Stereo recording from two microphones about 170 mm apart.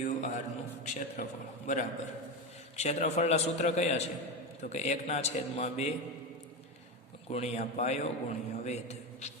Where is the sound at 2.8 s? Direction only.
40° left (ahead or behind).